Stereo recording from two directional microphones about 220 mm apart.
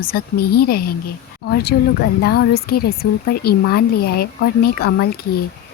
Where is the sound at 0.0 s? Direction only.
45° left (ahead or behind).